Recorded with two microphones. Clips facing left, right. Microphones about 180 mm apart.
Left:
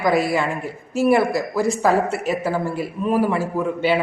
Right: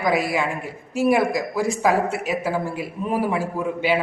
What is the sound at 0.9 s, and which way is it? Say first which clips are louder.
A man's voice: left 2 dB; 15° right (ahead or behind).